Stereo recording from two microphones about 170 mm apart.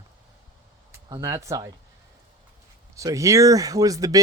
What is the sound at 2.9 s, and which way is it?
Speech, 20° right (ahead or behind).